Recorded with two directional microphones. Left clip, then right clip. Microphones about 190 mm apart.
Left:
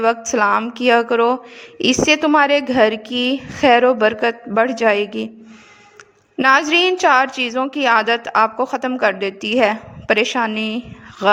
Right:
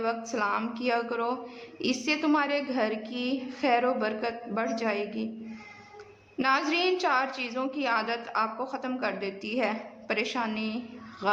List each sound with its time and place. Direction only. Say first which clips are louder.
0.3 s a woman's voice: left 13 dB; 45° left (ahead or behind)
6.3 s a woman's voice: left 13 dB; 45° left (ahead or behind)